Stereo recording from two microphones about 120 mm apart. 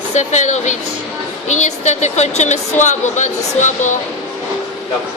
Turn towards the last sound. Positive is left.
turn(degrees=85)